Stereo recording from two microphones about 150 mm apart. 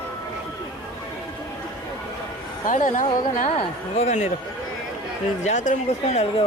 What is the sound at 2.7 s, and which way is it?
Speech, 60° left (ahead or behind).